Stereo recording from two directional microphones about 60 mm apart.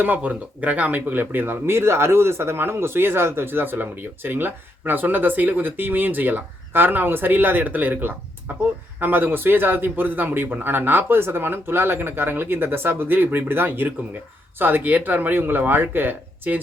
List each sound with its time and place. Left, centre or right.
0.0 s speech: right